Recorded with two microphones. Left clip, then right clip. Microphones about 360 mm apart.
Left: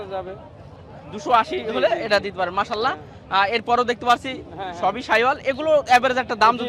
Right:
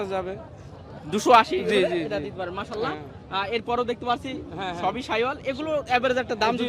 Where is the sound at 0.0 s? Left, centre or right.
Right.